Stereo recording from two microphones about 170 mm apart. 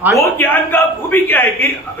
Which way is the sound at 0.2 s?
10° left (ahead or behind).